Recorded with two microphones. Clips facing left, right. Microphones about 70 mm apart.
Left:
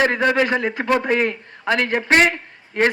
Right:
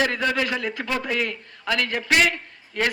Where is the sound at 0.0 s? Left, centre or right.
Left.